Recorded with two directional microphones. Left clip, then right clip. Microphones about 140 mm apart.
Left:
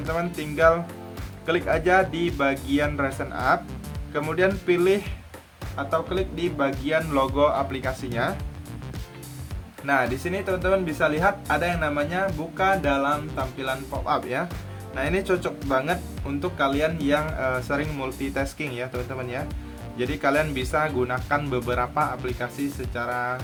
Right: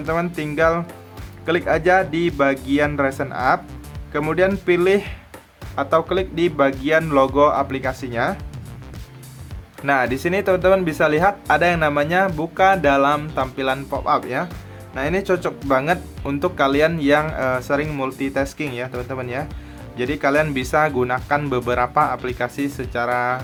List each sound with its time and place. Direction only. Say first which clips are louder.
0.1 s speech: right 6 dB; 40° right (ahead or behind)
7.3 s speech: right 6 dB; 30° right (ahead or behind)
9.8 s speech: right 5 dB; 50° right (ahead or behind)
14.0 s speech: right 4 dB; 30° right (ahead or behind)